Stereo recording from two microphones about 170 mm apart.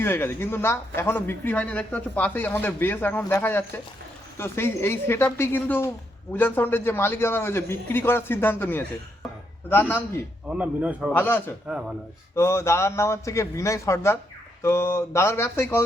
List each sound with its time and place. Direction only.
0.0 s speech: 15° left (ahead or behind)
10.5 s a man's voice: 10° right (ahead or behind)
11.1 s speech: 10° left (ahead or behind)
11.7 s speech: 5° right (ahead or behind)
12.3 s speech: 15° left (ahead or behind)